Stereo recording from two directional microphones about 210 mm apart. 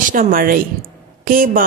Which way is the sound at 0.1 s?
40° right (ahead or behind).